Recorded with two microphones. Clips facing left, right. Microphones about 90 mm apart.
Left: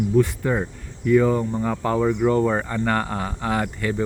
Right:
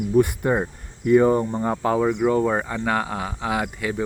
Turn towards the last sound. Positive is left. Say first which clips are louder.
# left 1 dB
turn(degrees=-5)  # may be behind; listen again after turning